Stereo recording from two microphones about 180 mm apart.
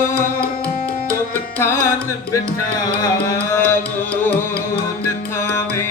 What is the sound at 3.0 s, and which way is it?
Music, 15° left (ahead or behind).